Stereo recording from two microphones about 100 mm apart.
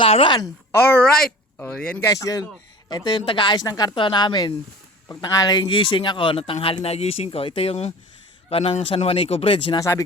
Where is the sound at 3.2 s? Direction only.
60° left (ahead or behind).